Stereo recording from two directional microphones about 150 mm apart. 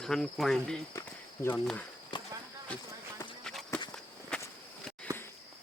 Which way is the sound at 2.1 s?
35° left (ahead or behind).